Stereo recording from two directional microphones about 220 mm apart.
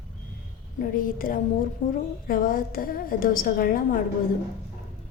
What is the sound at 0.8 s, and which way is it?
A woman's voice, 40° left (ahead or behind).